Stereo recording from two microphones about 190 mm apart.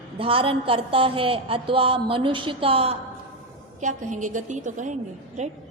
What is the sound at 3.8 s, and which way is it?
A woman's voice, 40° right (ahead or behind).